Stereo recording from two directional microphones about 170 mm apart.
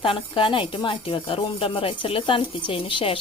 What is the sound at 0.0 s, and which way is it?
Speech, 30° left (ahead or behind).